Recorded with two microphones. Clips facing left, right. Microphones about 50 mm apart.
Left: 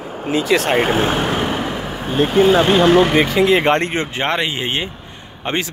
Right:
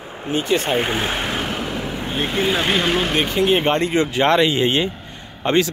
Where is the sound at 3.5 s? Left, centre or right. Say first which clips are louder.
Left 3 dB; left.